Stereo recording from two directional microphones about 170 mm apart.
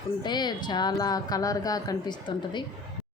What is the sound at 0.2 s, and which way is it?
A woman's voice, 25° left (ahead or behind).